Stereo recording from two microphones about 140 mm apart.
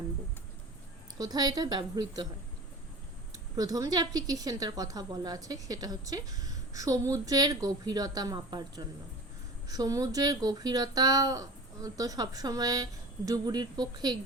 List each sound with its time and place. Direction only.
1.2 s a woman's voice: 30° right (ahead or behind)
3.3 s a woman's voice: 25° right (ahead or behind)